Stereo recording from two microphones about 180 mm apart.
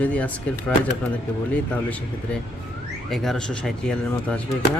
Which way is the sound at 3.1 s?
Centre (ahead or behind).